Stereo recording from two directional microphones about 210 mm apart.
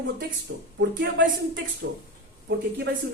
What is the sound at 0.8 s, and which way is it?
Speech, 60° right (ahead or behind).